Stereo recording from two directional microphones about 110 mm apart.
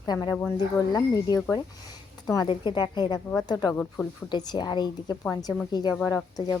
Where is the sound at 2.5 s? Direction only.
45° left (ahead or behind).